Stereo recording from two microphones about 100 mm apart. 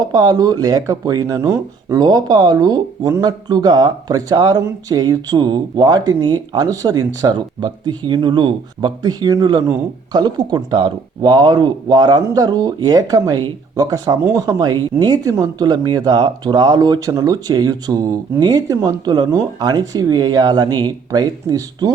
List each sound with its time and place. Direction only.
0.0 s speech: 45° right (ahead or behind)